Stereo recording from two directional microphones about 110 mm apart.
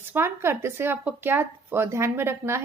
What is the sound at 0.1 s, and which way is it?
Speech, 20° right (ahead or behind).